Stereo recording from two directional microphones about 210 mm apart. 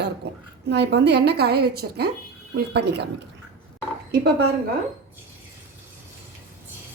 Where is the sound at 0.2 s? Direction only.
50° right (ahead or behind).